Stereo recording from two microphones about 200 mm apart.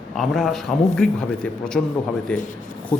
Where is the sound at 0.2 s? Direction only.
Centre (ahead or behind).